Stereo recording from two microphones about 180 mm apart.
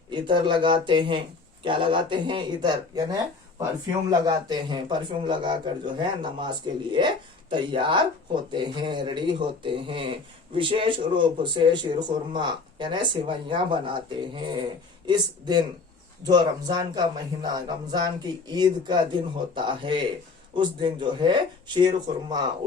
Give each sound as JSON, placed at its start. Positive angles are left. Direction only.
{"t": 0.1, "sound": "speech", "side_deg": -25}
{"t": 4.3, "sound": "speech", "side_deg": -25}